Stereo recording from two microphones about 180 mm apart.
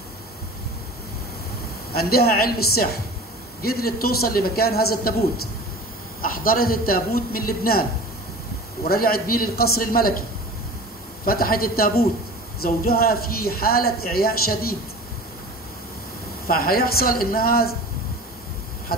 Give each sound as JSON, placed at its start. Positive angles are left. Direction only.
{"t": 1.9, "sound": "speech", "side_deg": 55}
{"t": 6.2, "sound": "speech", "side_deg": 55}
{"t": 8.8, "sound": "speech", "side_deg": 55}
{"t": 11.2, "sound": "speech", "side_deg": 55}
{"t": 16.4, "sound": "speech", "side_deg": 55}
{"t": 18.9, "sound": "a sound", "side_deg": 55}